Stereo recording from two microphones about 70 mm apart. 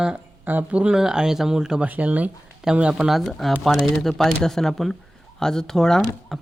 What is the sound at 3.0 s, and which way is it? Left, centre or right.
Speech, centre.